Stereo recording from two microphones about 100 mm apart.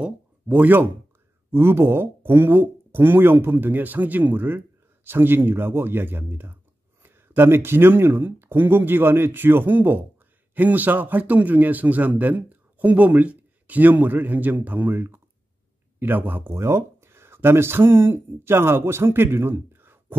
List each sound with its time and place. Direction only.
0.0 s a man's voice: 15° right (ahead or behind)